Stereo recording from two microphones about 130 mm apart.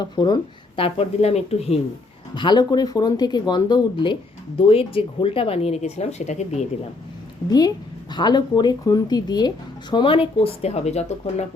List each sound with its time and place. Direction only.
0.0 s speech: 35° left (ahead or behind)
0.8 s speech: 45° left (ahead or behind)
2.3 s speech: 35° left (ahead or behind); by 6.7 s 55° left (ahead or behind)
8.1 s speech: 35° left (ahead or behind); by 11.4 s 55° left (ahead or behind)